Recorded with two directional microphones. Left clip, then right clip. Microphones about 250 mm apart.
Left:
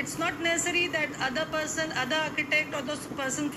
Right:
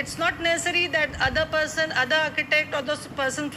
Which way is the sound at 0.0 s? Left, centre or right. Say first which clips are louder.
Right 5 dB; centre.